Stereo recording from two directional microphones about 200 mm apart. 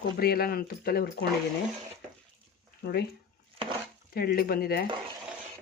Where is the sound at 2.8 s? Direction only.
55° left (ahead or behind).